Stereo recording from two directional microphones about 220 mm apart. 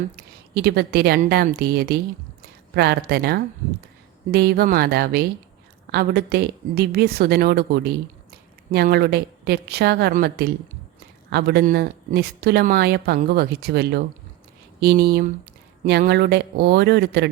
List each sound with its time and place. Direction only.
0.5 s speech: 45° right (ahead or behind)